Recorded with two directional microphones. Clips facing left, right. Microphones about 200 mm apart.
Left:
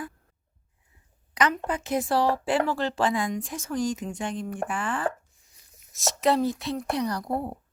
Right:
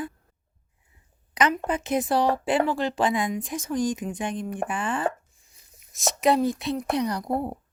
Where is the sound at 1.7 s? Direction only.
20° right (ahead or behind).